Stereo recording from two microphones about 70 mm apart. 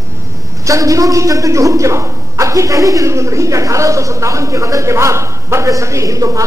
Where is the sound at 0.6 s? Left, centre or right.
Right.